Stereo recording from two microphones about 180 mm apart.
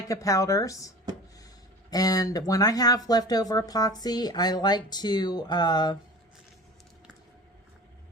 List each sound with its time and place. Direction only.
0.1 s speech: 20° left (ahead or behind)
1.9 s speech: 20° left (ahead or behind)